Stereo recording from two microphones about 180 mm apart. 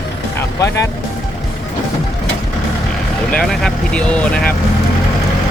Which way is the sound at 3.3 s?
5° left (ahead or behind).